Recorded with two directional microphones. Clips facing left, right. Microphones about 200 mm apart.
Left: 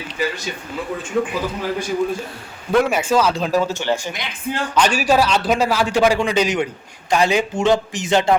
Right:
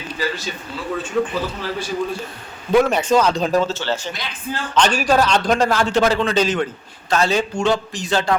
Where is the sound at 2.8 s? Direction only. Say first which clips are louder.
Right 1 dB; 10° left (ahead or behind).